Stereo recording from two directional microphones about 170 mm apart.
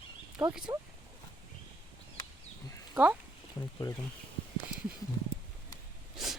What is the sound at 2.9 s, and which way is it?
Speech, 10° right (ahead or behind).